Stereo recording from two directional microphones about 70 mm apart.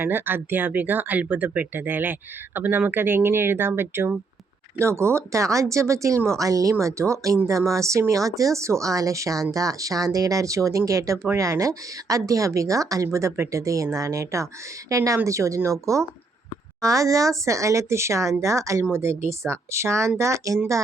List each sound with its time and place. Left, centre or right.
0.0 s speech: right